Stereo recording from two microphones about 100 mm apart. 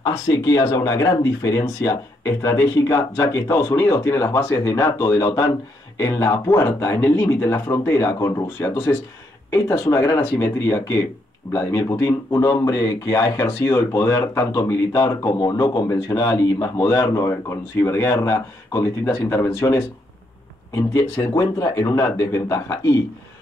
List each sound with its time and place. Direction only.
0.0 s speech: 40° left (ahead or behind)